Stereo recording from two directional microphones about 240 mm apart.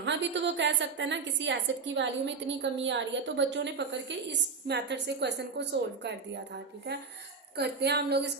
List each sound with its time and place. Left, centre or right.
0.0 s a woman's voice: right
7.5 s a woman's voice: right